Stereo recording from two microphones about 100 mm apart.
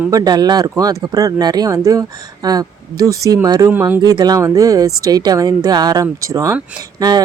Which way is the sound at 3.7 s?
20° right (ahead or behind).